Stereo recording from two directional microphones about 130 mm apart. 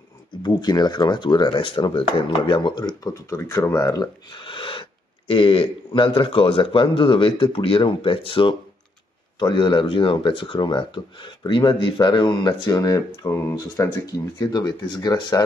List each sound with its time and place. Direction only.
0.4 s speech: 35° left (ahead or behind)